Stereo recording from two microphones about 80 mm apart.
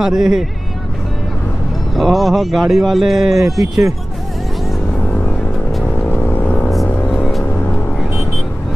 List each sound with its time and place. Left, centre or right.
0.0 s speech: centre
2.0 s speech: centre
4.9 s music: centre
6.0 s vehicle: left
7.1 s music: centre